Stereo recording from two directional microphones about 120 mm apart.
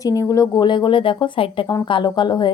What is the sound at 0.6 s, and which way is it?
A woman's voice, 40° left (ahead or behind).